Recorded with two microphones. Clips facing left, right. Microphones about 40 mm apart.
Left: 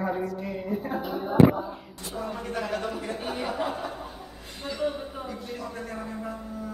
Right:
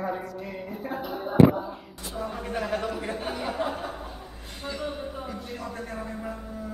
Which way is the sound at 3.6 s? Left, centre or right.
Centre.